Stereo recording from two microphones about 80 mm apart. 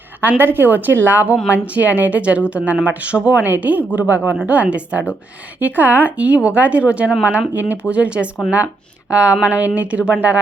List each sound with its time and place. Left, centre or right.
0.2 s speech: right